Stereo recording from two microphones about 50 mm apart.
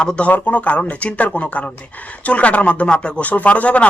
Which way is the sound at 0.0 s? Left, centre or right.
Left.